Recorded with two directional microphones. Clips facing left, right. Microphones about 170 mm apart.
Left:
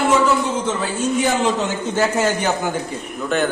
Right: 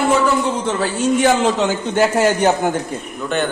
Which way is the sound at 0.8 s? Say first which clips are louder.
Right 4 dB; 80° right.